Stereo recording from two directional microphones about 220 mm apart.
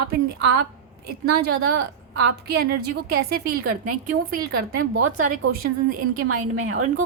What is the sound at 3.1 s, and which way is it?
A woman's voice, 45° right (ahead or behind).